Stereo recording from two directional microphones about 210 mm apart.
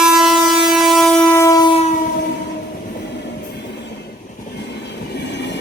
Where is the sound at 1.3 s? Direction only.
15° left (ahead or behind).